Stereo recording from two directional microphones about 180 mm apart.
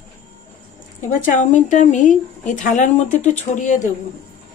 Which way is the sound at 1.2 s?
45° left (ahead or behind).